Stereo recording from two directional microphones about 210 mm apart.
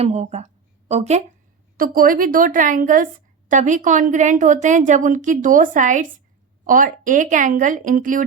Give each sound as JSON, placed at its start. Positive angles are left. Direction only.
{"t": 0.0, "sound": "a woman's voice", "side_deg": -30}
{"t": 1.8, "sound": "a woman's voice", "side_deg": -45}